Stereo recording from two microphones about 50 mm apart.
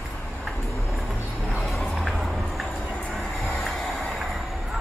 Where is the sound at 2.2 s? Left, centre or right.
Centre.